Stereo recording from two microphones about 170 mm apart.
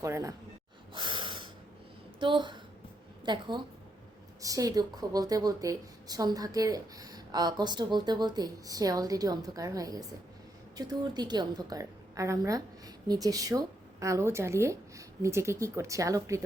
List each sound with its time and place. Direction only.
0.0 s speech: 20° right (ahead or behind)
0.9 s breathing: 30° right (ahead or behind)
2.1 s a woman's voice: 30° right (ahead or behind)